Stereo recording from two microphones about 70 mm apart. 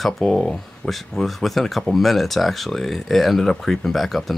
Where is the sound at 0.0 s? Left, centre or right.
Centre.